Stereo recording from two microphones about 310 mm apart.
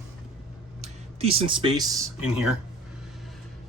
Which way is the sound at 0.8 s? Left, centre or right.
Centre.